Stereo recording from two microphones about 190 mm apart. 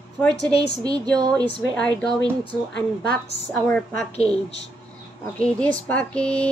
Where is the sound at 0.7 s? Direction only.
20° right (ahead or behind).